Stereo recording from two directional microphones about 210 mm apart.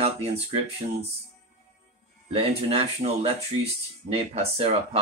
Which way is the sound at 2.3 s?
25° right (ahead or behind).